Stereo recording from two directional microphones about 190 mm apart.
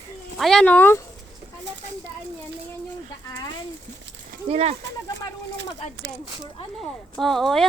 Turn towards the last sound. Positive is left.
turn(degrees=0)  # may be behind; listen again after turning